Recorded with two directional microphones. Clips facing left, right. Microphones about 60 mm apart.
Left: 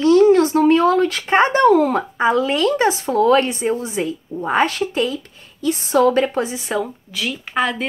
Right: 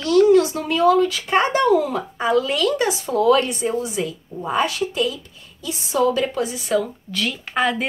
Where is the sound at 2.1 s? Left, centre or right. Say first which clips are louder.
Left 1 dB; left.